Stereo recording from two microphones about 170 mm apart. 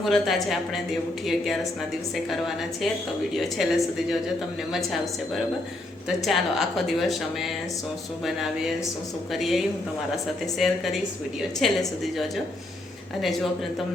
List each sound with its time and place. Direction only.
0.0 s a woman's voice: centre (ahead or behind)